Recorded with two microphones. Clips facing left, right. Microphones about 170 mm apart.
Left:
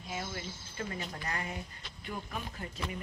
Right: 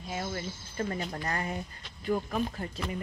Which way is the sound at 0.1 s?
45° right (ahead or behind).